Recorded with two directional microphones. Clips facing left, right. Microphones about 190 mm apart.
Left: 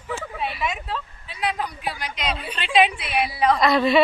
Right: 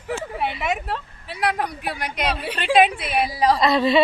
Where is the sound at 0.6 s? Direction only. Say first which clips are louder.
Right 2 dB; 65° right (ahead or behind); by 3.0 s 50° right (ahead or behind).